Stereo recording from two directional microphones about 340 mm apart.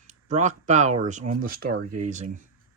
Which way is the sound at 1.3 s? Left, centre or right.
Right.